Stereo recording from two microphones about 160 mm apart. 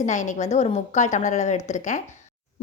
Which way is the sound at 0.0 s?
50° left (ahead or behind).